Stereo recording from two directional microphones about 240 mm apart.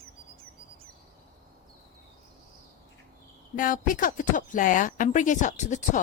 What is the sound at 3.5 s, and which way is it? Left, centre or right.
Speech, left.